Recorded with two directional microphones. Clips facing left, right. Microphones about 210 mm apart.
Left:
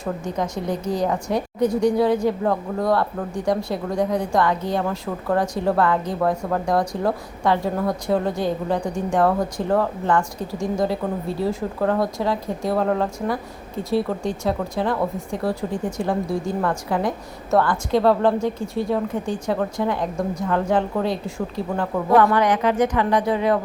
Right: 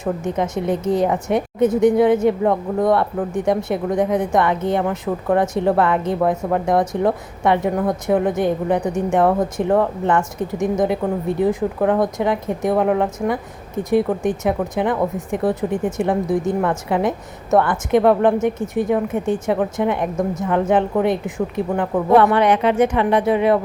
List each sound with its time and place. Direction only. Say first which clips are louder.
0.0 s speech: right 4 dB; 20° right (ahead or behind)